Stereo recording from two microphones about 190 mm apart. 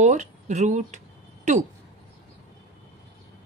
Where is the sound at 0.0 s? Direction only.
40° right (ahead or behind).